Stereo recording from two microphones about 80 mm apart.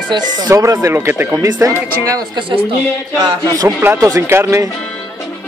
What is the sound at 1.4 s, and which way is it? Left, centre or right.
Speech, right.